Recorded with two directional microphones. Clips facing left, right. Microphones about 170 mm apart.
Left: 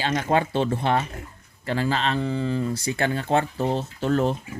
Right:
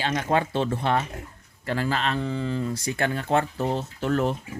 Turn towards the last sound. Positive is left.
turn(degrees=30)  # may be behind; listen again after turning